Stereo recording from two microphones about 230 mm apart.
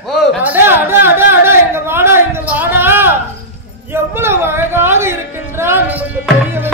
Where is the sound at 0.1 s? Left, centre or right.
Centre.